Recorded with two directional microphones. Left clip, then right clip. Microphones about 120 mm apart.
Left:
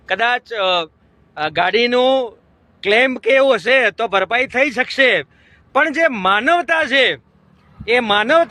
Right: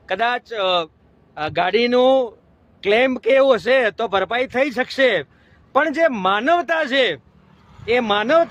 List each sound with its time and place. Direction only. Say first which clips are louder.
0.0 s speech: left 3 dB; 30° left (ahead or behind)